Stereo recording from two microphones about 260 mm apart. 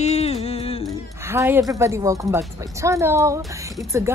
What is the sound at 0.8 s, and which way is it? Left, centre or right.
Speech, centre.